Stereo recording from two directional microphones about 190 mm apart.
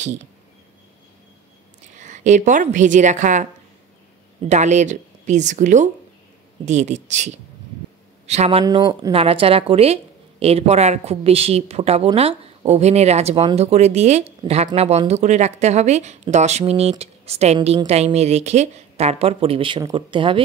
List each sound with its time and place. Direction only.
2.0 s speech: 40° right (ahead or behind)
4.5 s speech: 40° right (ahead or behind)